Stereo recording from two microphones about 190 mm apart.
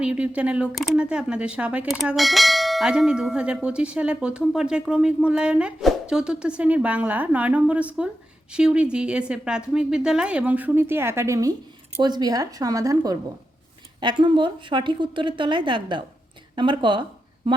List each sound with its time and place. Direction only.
0.0 s a woman's voice: 5° right (ahead or behind); by 17.0 s 25° right (ahead or behind)